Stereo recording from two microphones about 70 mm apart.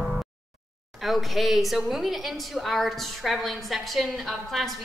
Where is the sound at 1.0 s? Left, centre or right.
Centre.